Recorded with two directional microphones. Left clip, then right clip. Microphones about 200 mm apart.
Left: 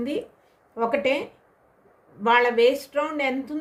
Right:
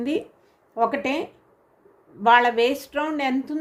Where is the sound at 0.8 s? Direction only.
30° right (ahead or behind).